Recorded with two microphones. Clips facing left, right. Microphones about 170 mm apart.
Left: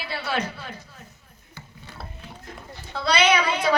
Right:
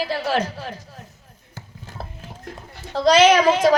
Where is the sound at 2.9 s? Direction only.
40° right (ahead or behind).